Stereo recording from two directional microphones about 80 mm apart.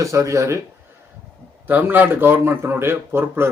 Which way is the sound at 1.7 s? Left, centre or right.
Right.